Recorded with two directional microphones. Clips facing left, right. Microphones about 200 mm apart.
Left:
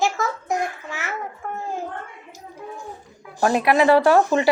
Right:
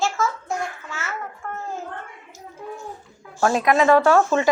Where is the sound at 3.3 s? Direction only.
15° left (ahead or behind).